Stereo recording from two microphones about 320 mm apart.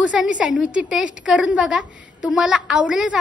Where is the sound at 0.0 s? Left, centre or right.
Centre.